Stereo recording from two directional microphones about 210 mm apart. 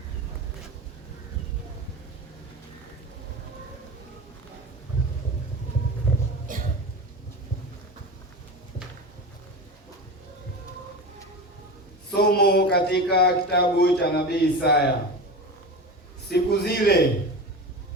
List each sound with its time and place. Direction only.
6.5 s cough: 40° right (ahead or behind)
12.1 s speech: 50° left (ahead or behind)
16.3 s speech: 50° left (ahead or behind)